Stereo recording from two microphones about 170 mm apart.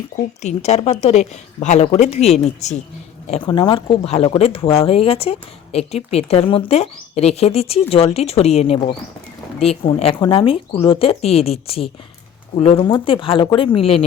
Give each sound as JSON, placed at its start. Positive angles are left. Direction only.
{"t": 0.2, "sound": "speech", "side_deg": 40}
{"t": 3.4, "sound": "speech", "side_deg": 25}